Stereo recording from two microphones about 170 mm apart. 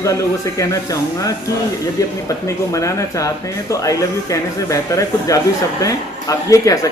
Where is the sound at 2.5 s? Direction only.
20° left (ahead or behind).